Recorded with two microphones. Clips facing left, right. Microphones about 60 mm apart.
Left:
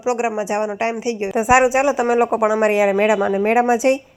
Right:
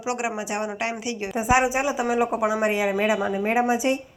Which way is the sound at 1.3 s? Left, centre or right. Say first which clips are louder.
Left 7 dB; left.